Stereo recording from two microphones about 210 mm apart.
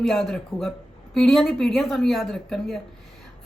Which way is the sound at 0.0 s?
Centre (ahead or behind).